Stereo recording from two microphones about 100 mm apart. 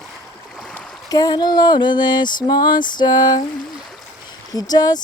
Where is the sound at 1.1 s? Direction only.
40° left (ahead or behind).